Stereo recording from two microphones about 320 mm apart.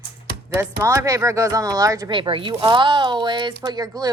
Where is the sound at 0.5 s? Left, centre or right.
Centre.